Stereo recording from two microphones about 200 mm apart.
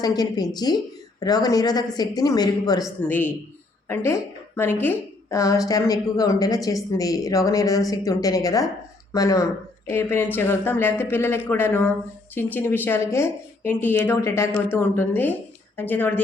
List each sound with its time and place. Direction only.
0.0 s a man's voice: 20° left (ahead or behind)